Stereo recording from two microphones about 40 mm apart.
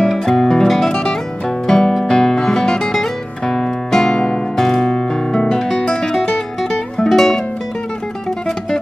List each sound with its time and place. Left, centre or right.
0.0 s music: centre
7.1 s music: centre